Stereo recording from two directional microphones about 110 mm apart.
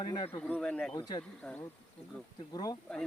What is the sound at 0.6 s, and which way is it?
Speech, 10° left (ahead or behind).